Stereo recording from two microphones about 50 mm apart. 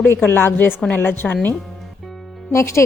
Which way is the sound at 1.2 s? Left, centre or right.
Left.